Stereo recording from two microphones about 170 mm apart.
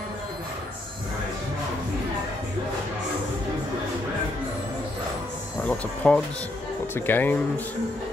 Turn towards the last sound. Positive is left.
turn(degrees=10)  # may be behind; listen again after turning